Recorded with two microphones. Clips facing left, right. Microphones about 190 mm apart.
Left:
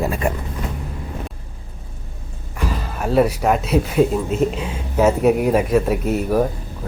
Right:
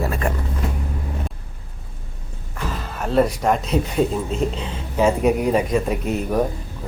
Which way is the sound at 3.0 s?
10° left (ahead or behind).